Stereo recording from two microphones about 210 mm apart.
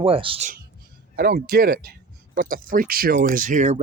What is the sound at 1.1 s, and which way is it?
Speech, 50° right (ahead or behind).